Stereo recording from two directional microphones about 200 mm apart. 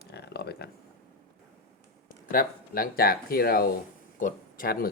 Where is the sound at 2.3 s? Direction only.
45° left (ahead or behind).